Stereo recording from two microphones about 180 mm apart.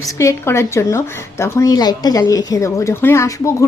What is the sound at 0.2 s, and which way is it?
A woman's voice, 15° left (ahead or behind).